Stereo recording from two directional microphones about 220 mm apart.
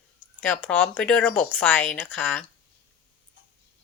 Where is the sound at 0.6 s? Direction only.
5° left (ahead or behind).